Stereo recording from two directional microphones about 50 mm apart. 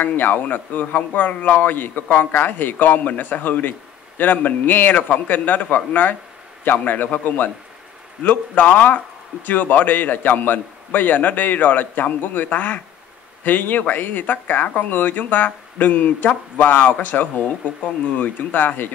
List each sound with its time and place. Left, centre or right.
0.0 s a man's voice: left